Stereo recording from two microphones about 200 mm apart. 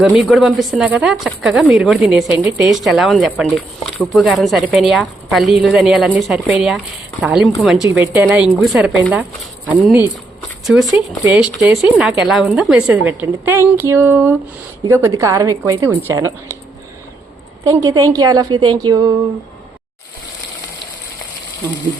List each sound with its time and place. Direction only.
0.0 s speech: centre (ahead or behind)
11.3 s a woman's voice: 5° right (ahead or behind)
17.6 s a woman's voice: 20° right (ahead or behind)